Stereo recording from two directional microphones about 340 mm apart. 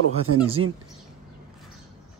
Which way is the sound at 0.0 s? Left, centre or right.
Right.